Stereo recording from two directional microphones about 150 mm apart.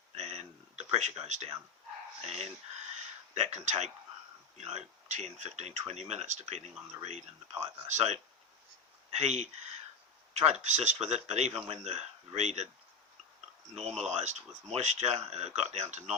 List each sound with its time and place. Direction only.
0.1 s a sound: 45° right (ahead or behind)
2.2 s speech: 45° right (ahead or behind)
13.8 s speech: 50° right (ahead or behind)